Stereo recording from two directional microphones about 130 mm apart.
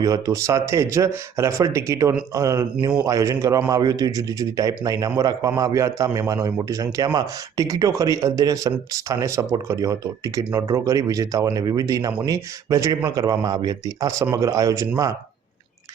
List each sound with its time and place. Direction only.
0.0 s speech: 25° right (ahead or behind)